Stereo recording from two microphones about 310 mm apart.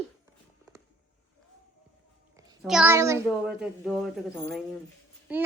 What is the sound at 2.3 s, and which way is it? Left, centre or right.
A child's voice, centre.